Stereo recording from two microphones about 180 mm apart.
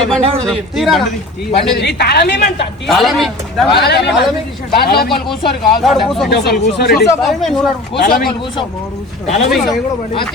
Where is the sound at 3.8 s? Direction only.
65° left (ahead or behind).